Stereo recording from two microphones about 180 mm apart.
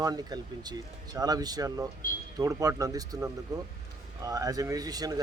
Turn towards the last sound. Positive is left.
turn(degrees=-20)  # may be behind; listen again after turning